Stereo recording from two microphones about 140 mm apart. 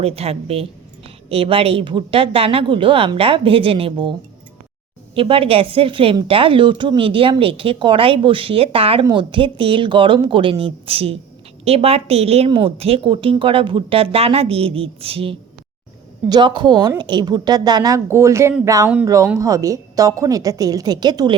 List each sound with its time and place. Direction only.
0.0 s a woman's voice: 45° right (ahead or behind)
5.1 s a woman's voice: 40° right (ahead or behind)